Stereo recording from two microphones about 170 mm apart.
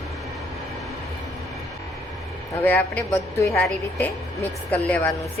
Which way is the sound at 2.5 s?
10° left (ahead or behind).